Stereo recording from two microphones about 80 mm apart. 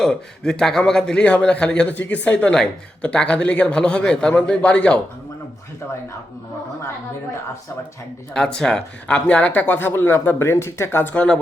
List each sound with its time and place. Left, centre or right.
0.0 s a man's voice: centre
8.3 s a man's voice: centre; by 11.1 s left
11.1 s a man's voice: centre